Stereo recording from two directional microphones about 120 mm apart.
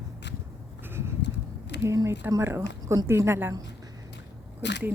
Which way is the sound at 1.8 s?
25° right (ahead or behind).